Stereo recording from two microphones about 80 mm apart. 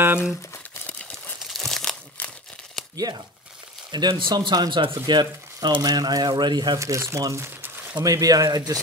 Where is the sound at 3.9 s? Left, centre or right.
Right.